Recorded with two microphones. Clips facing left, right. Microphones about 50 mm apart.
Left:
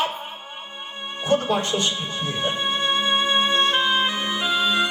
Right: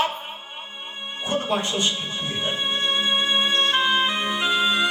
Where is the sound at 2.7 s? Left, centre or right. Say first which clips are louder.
Left 1 dB; centre.